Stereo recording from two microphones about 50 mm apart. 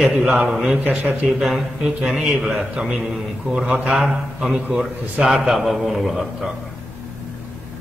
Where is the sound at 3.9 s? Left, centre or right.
Centre.